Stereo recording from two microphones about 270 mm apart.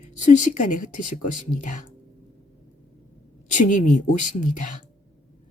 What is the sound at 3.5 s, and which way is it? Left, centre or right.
Speech, left.